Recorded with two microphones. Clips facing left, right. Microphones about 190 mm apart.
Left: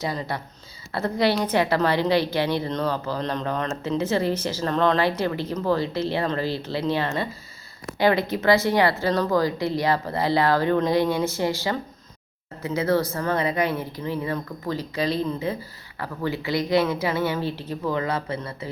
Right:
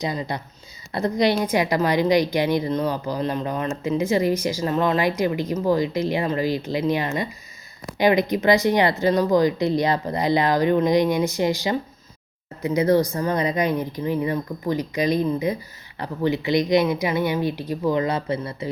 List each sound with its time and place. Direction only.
0.0 s a woman's voice: 15° right (ahead or behind)